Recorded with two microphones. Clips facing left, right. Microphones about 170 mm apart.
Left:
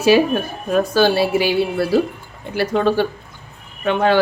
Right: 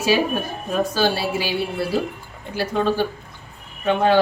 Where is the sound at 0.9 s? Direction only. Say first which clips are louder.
Left 6 dB; 60° left (ahead or behind).